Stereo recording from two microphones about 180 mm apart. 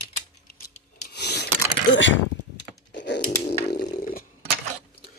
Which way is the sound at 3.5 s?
60° left (ahead or behind).